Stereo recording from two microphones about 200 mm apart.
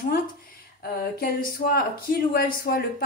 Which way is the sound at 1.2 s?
45° left (ahead or behind).